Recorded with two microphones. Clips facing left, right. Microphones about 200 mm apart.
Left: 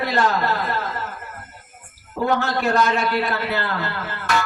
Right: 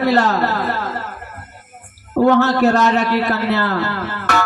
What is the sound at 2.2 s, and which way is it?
Speech, 70° right (ahead or behind).